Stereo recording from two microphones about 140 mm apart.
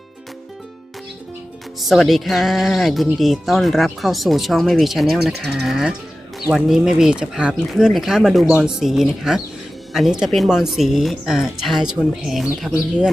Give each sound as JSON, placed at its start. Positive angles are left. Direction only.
{"t": 1.8, "sound": "speech", "side_deg": 0}